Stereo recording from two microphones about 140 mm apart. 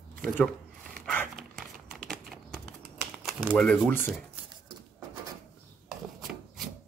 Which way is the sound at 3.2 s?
Centre (ahead or behind).